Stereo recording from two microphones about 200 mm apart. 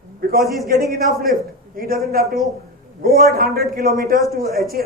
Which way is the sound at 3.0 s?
45° right (ahead or behind).